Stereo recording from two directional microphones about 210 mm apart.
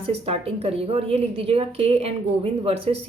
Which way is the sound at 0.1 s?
30° right (ahead or behind).